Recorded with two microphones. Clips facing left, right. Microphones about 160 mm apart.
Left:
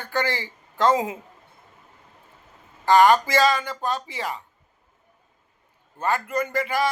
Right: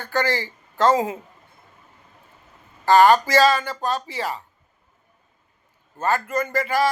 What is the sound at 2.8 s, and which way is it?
Speech, 20° left (ahead or behind).